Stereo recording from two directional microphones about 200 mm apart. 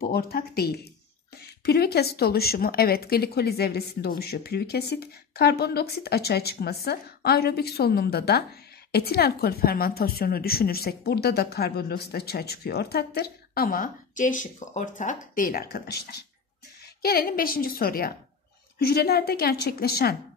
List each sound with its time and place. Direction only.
0.0 s a woman's voice: 50° left (ahead or behind)